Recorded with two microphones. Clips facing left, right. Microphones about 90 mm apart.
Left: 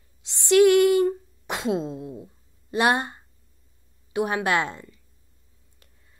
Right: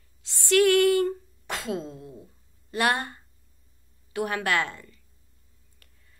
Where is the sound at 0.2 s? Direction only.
20° left (ahead or behind).